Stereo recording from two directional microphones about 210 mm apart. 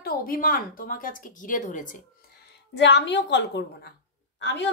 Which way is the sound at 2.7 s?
55° left (ahead or behind).